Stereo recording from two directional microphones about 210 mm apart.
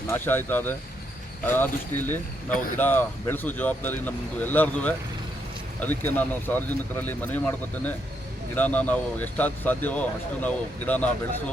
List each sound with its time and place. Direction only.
0.1 s speech: 10° left (ahead or behind)